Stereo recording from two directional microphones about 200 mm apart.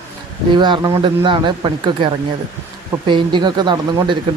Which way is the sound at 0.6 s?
20° right (ahead or behind).